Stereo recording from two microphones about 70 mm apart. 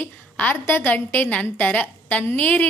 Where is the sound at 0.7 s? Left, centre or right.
Left.